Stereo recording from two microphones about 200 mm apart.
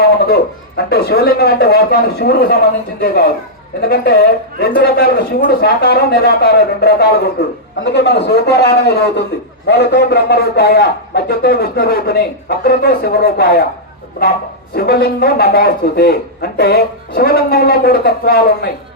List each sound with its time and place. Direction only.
0.0 s a sound: 50° left (ahead or behind)
0.9 s a man's voice: 50° left (ahead or behind)
14.8 s a man's voice: 50° left (ahead or behind)